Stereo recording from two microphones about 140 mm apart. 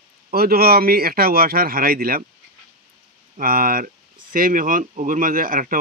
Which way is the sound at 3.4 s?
90° right.